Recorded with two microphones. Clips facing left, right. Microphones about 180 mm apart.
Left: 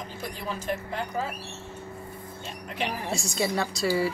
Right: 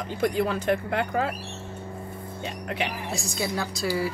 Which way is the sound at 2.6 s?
70° right (ahead or behind).